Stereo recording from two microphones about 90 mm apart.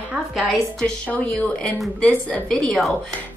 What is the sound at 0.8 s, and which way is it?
A woman's voice, 15° left (ahead or behind).